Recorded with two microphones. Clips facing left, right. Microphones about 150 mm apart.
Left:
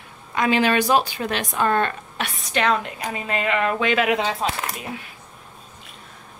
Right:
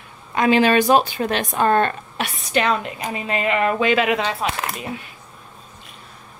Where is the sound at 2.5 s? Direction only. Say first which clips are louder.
Right 1 dB; 5° right (ahead or behind).